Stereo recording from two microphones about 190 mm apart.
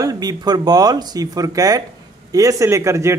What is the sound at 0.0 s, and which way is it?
A man's voice, 20° right (ahead or behind).